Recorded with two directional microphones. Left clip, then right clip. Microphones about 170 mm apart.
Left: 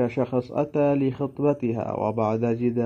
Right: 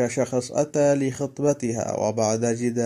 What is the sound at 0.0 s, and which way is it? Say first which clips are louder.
Speech: right 1 dB; 15° right (ahead or behind).